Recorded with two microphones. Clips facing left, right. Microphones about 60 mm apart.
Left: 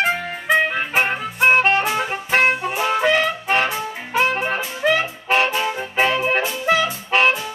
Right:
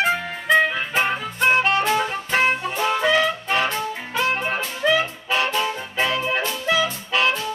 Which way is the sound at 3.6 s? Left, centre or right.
Centre.